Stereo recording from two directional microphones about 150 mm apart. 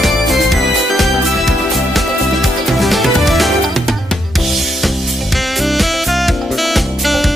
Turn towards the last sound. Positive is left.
turn(degrees=0)  # may be behind; listen again after turning